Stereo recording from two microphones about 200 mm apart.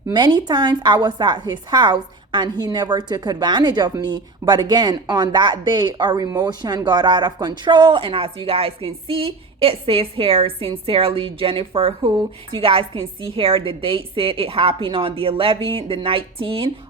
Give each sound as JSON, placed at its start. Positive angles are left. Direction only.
{"t": 0.1, "sound": "a woman's voice", "side_deg": -20}